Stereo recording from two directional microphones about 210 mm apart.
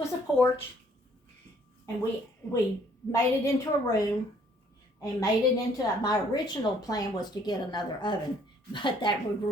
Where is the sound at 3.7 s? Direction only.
15° left (ahead or behind).